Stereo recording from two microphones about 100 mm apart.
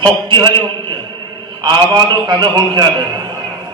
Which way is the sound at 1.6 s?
45° right (ahead or behind).